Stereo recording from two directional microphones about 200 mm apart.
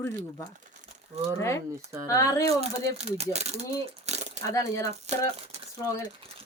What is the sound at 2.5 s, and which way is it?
Speech, 30° right (ahead or behind).